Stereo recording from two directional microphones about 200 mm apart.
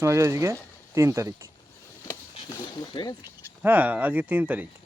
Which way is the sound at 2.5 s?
20° left (ahead or behind).